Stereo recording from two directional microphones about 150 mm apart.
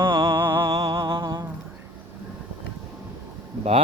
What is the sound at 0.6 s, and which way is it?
Music, 25° right (ahead or behind).